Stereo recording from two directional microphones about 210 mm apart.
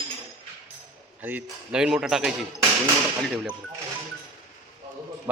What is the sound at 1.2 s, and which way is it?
A man's voice, 10° right (ahead or behind).